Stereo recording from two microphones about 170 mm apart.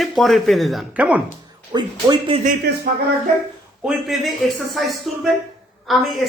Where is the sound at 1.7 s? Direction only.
30° right (ahead or behind).